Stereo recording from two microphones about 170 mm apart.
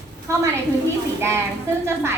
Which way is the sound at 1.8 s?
15° right (ahead or behind).